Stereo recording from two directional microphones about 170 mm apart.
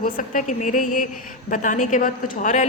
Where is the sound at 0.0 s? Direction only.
50° left (ahead or behind).